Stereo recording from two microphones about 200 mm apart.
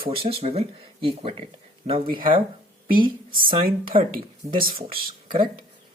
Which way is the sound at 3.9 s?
30° right (ahead or behind).